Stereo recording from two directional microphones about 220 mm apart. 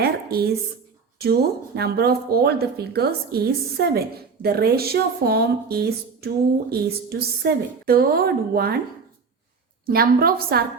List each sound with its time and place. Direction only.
0.0 s a sound: 45° right (ahead or behind)
1.2 s speech: 45° right (ahead or behind)
9.8 s speech: 45° right (ahead or behind)